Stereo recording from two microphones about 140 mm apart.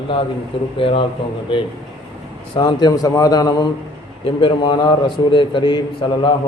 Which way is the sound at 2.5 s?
30° left (ahead or behind).